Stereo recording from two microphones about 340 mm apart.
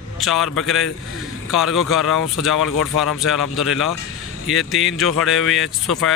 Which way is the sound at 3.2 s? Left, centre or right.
Centre.